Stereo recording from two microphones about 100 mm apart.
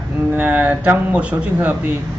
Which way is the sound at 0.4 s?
15° right (ahead or behind).